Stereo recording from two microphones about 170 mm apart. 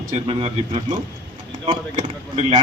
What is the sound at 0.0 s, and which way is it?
Speech, 40° right (ahead or behind).